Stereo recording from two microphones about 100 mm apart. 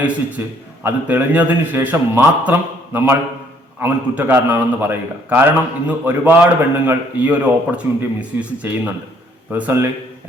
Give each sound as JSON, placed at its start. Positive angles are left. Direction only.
{"t": 0.0, "sound": "a man's voice", "side_deg": -15}